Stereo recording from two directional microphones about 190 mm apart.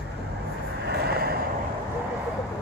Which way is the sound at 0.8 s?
55° right (ahead or behind).